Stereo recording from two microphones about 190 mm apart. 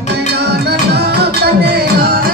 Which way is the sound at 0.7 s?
60° right (ahead or behind).